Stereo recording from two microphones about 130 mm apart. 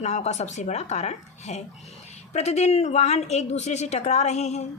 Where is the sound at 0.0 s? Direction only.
60° left (ahead or behind).